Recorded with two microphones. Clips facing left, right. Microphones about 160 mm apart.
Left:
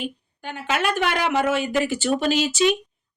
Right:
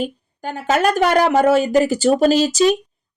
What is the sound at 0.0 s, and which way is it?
A woman's voice, 40° right (ahead or behind).